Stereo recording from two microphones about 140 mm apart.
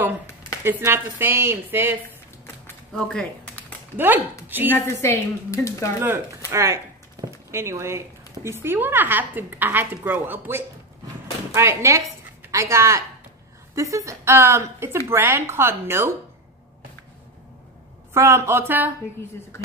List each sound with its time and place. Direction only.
0.7 s a woman's voice: 15° right (ahead or behind)
2.9 s speech: 5° left (ahead or behind)
3.9 s a woman's voice: 15° right (ahead or behind)
4.7 s a woman's voice: 20° left (ahead or behind)
6.5 s a sound: 20° right (ahead or behind)
8.5 s a woman's voice: 15° right (ahead or behind)
18.1 s a woman's voice: 20° right (ahead or behind)